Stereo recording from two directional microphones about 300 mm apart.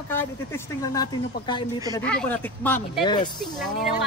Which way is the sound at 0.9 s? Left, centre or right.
Centre.